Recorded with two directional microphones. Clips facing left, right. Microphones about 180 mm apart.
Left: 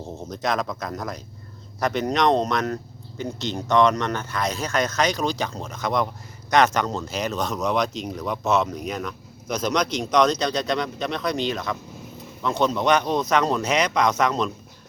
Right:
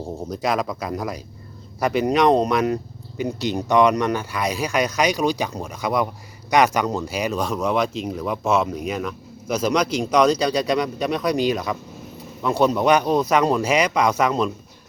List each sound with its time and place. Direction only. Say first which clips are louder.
0.2 s speech: right 2 dB; 10° right (ahead or behind)